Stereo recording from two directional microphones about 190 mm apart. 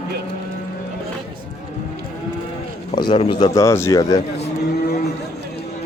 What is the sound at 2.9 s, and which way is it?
Speech, 25° left (ahead or behind).